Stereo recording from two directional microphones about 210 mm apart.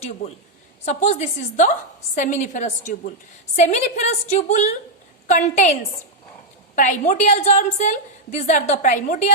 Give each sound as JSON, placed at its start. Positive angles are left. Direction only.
{"t": 0.9, "sound": "a woman's voice", "side_deg": 35}
{"t": 6.7, "sound": "a woman's voice", "side_deg": 35}